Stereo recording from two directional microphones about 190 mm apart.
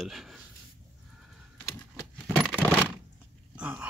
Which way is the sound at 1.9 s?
5° right (ahead or behind).